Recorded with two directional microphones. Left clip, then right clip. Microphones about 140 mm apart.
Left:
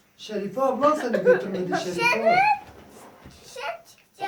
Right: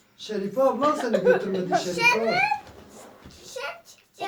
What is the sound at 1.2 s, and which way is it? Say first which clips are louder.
Speech: left 2 dB; 20° right (ahead or behind).